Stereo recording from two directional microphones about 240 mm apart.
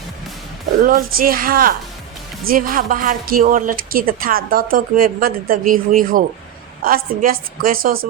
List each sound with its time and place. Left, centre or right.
0.8 s a woman's voice: right